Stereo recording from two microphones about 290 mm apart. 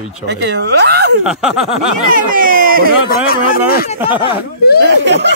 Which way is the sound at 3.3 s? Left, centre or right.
Left.